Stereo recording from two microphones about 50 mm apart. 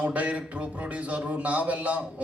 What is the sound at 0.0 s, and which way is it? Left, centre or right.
A man's voice, right.